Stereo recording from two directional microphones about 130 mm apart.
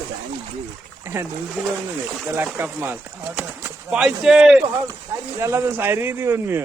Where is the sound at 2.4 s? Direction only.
15° right (ahead or behind).